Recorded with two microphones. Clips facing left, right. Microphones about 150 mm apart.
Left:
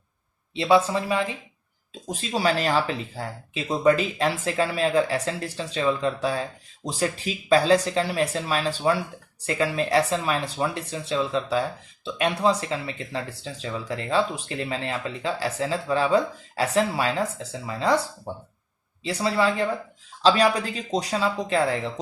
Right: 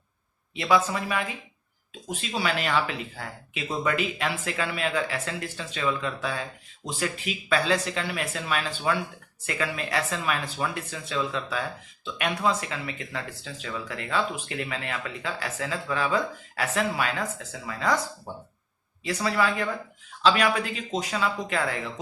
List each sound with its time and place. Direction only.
0.5 s speech: 30° left (ahead or behind)
19.0 s speech: 30° left (ahead or behind)